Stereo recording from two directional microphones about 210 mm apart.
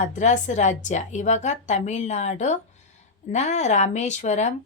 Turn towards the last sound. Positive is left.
turn(degrees=35)  # may be behind; listen again after turning